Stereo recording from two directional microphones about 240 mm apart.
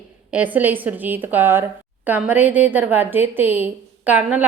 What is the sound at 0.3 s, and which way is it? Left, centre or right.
A woman's voice, centre.